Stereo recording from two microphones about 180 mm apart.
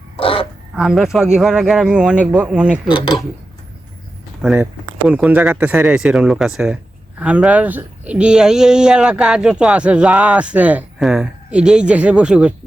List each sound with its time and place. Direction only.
0.2 s a sound: 30° left (ahead or behind)
0.8 s speech: centre (ahead or behind)
2.9 s speech: 25° left (ahead or behind)
4.4 s speech: 5° right (ahead or behind)